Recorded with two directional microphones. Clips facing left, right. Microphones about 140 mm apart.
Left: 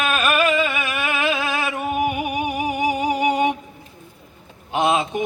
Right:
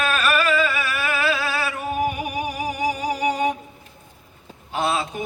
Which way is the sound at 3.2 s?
40° right (ahead or behind).